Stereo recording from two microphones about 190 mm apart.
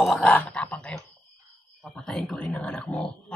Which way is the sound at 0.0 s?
5° left (ahead or behind).